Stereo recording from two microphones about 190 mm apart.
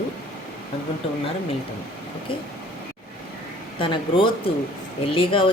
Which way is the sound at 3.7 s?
25° left (ahead or behind).